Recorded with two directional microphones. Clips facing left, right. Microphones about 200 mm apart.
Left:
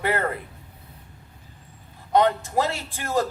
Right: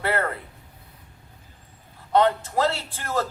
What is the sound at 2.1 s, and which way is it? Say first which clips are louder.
Speech: even; 15° left (ahead or behind).